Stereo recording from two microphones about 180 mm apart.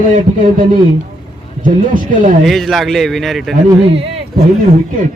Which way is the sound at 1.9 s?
45° right (ahead or behind).